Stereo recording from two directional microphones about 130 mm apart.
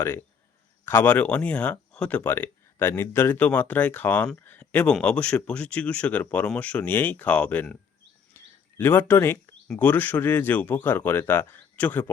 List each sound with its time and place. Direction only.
0.9 s speech: 15° left (ahead or behind)
8.4 s a sound: 20° left (ahead or behind)
8.8 s speech: 15° left (ahead or behind)